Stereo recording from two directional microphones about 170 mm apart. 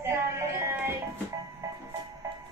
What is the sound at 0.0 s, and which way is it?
Music, 15° right (ahead or behind).